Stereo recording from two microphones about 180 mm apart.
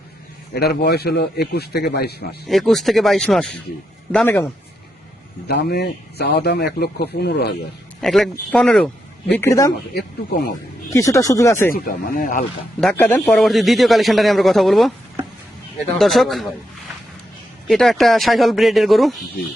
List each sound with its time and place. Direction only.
0.5 s a man's voice: 65° left (ahead or behind)
2.5 s speech: centre (ahead or behind)
5.5 s a man's voice: 60° left (ahead or behind)
8.0 s speech: centre (ahead or behind); by 9.7 s 15° left (ahead or behind)
10.9 s speech: 20° left (ahead or behind)
11.7 s speech: 50° left (ahead or behind)
12.8 s speech: 10° left (ahead or behind)
13.4 s speech: centre (ahead or behind)
16.0 s speech: centre (ahead or behind)
17.7 s speech: centre (ahead or behind)